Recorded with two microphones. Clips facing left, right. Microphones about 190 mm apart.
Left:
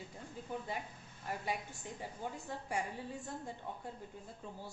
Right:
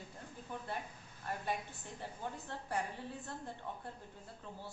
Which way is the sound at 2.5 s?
10° left (ahead or behind).